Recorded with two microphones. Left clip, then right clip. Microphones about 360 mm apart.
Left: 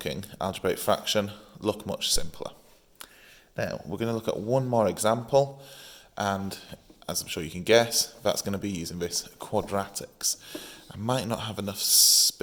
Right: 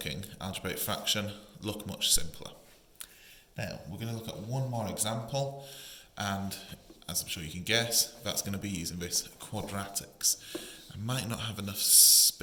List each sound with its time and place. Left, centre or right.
0.0 s speech: centre
3.5 s speech: centre